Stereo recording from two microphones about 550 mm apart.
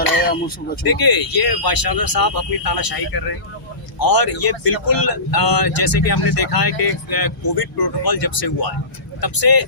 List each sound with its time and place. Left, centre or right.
0.2 s speech: centre
0.9 s speech: left